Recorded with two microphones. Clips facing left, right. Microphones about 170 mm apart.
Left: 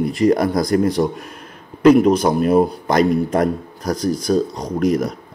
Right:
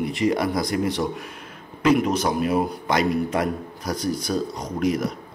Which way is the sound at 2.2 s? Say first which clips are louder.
Left 7 dB; 45° left (ahead or behind).